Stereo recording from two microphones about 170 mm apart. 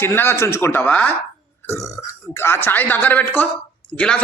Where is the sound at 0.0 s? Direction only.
15° left (ahead or behind).